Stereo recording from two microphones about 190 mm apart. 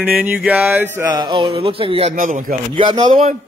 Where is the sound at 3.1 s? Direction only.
40° right (ahead or behind).